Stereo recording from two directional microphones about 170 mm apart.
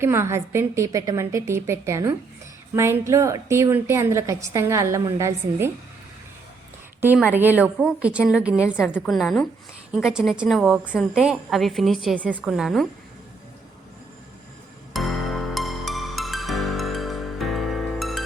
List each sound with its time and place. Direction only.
0.0 s a woman's voice: 15° right (ahead or behind)
7.0 s a woman's voice: 10° right (ahead or behind)
14.9 s music: centre (ahead or behind)